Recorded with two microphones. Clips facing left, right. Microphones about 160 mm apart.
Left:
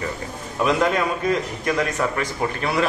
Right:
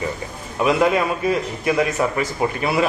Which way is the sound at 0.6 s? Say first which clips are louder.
Right 2 dB; 5° right (ahead or behind).